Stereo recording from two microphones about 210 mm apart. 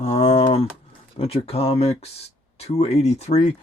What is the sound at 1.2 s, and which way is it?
Speech, 25° left (ahead or behind).